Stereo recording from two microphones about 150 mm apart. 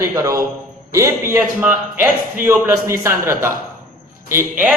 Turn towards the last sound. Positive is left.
turn(degrees=-15)  # may be behind; listen again after turning